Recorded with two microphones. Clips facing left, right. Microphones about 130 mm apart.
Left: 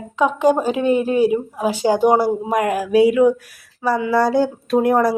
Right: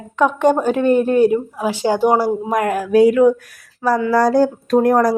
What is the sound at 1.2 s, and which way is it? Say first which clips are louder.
Speech: right 1 dB; 15° left (ahead or behind).